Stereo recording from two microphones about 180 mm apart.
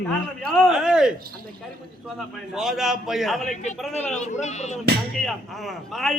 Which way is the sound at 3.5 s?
40° left (ahead or behind).